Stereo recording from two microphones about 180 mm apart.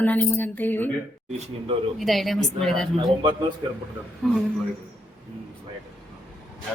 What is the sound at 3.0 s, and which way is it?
Speech, 25° right (ahead or behind).